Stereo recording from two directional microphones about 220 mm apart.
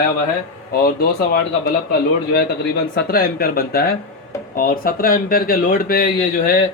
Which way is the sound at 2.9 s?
45° left (ahead or behind).